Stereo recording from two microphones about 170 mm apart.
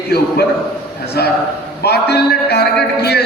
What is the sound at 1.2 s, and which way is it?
A man's voice, 70° left (ahead or behind).